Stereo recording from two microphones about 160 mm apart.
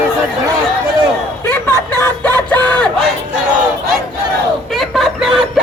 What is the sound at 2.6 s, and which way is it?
Crowd, 10° left (ahead or behind).